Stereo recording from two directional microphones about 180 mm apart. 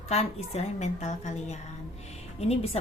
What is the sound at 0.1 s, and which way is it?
A woman's voice, 35° left (ahead or behind).